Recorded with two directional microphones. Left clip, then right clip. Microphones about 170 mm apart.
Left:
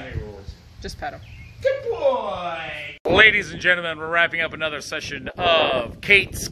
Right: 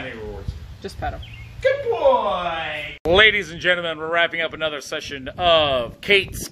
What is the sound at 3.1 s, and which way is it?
A man's voice, 15° right (ahead or behind).